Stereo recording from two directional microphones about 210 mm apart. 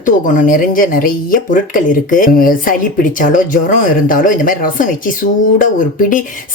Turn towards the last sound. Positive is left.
turn(degrees=40)  # may be behind; listen again after turning